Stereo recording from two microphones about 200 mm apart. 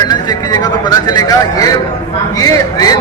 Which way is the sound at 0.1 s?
20° left (ahead or behind).